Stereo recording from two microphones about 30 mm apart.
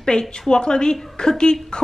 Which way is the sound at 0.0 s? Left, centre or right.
Centre.